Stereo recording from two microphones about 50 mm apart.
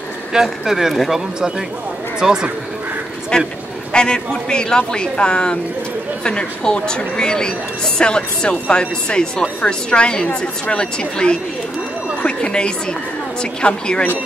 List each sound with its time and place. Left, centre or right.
0.3 s speech: centre
2.1 s speech: centre
3.3 s a woman's voice: centre